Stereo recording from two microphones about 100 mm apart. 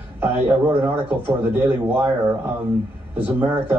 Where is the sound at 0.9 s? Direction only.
20° right (ahead or behind).